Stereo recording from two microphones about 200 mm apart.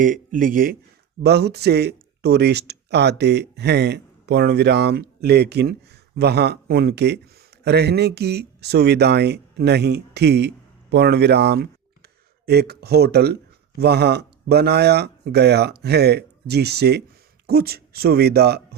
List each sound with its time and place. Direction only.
0.0 s speech: 40° right (ahead or behind)